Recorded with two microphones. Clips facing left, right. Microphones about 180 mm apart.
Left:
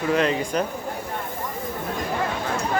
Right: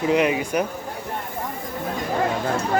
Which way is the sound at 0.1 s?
15° right (ahead or behind).